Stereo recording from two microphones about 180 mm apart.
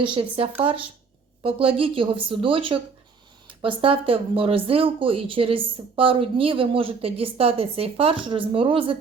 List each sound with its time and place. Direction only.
0.1 s a woman's voice: 30° right (ahead or behind)